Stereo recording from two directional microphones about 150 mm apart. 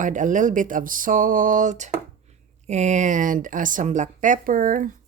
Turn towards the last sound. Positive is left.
turn(degrees=-65)  # may be behind; listen again after turning